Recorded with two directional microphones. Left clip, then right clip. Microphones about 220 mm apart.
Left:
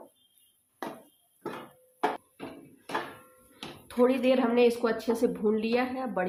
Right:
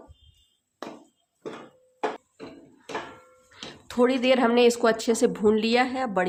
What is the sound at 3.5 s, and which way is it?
Speech, 25° right (ahead or behind).